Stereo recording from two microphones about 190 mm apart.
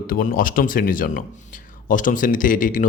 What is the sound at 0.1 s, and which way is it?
A man's voice, 45° left (ahead or behind).